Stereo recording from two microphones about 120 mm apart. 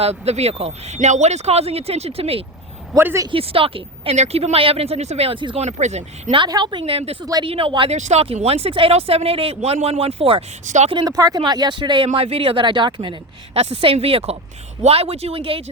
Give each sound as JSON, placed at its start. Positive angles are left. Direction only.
{"t": 0.0, "sound": "speech", "side_deg": -60}
{"t": 3.0, "sound": "a man's voice", "side_deg": -20}
{"t": 3.3, "sound": "speech", "side_deg": -50}
{"t": 4.1, "sound": "speech", "side_deg": -65}
{"t": 5.5, "sound": "speech", "side_deg": -70}
{"t": 6.5, "sound": "speech", "side_deg": -40}
{"t": 7.9, "sound": "speech", "side_deg": -70}
{"t": 11.0, "sound": "speech", "side_deg": -30}
{"t": 12.0, "sound": "speech", "side_deg": -55}